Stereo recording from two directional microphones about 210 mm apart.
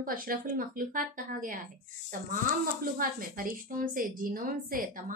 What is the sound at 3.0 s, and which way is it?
Speech, 40° right (ahead or behind).